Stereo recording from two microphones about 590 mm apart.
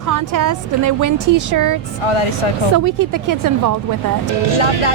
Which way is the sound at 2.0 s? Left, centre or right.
Left.